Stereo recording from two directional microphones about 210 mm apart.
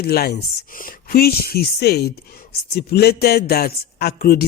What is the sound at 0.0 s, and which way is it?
Speech, 50° left (ahead or behind).